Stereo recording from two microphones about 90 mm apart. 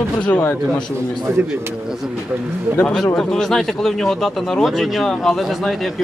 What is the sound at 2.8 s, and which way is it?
Speech, 5° left (ahead or behind).